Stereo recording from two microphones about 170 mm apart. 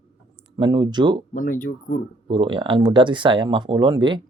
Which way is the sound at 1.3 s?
50° left (ahead or behind).